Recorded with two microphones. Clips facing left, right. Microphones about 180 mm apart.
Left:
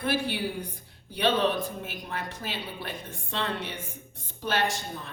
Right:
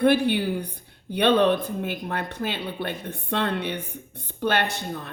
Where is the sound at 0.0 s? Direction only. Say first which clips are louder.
Right 9 dB; 60° right (ahead or behind).